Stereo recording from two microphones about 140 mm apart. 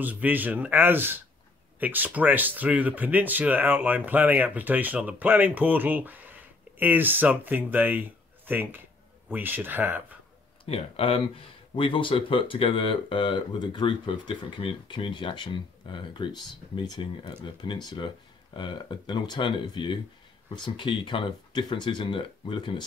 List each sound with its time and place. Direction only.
0.0 s speech: 10° right (ahead or behind)
10.6 s speech: 40° left (ahead or behind)